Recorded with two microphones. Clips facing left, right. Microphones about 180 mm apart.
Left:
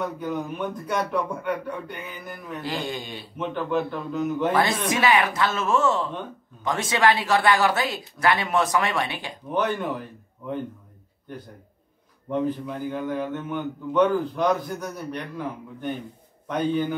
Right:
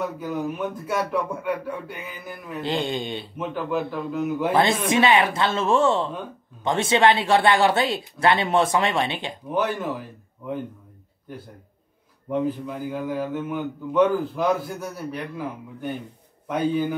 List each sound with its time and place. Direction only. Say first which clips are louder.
0.0 s a man's voice: right 1 dB; 5° right (ahead or behind)
2.6 s speech: right 5 dB; 25° right (ahead or behind)
3.3 s a man's voice: left 1 dB; 5° right (ahead or behind)
4.8 s speech: right 2 dB; 25° right (ahead or behind)
9.5 s a man's voice: even; 5° right (ahead or behind)
12.3 s a man's voice: right 1 dB; 5° right (ahead or behind)